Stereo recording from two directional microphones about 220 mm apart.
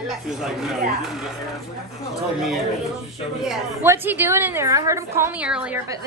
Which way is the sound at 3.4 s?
5° right (ahead or behind).